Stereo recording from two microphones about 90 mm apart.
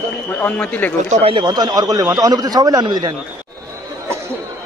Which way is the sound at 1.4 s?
50° right (ahead or behind).